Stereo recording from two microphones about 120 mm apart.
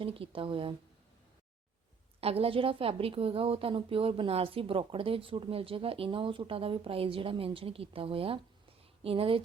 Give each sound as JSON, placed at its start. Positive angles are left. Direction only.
{"t": 0.0, "sound": "a woman's voice", "side_deg": -50}
{"t": 2.2, "sound": "a woman's voice", "side_deg": -55}
{"t": 8.8, "sound": "a sound", "side_deg": -55}